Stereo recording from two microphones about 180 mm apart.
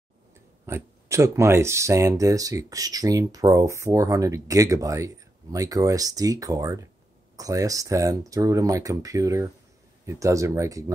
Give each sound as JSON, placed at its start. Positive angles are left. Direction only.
{"t": 0.7, "sound": "speech", "side_deg": -15}